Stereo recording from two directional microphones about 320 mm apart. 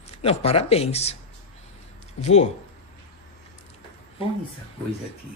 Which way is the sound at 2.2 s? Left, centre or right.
Left.